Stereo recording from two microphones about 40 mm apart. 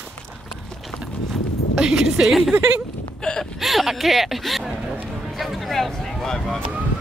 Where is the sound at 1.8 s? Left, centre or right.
Centre.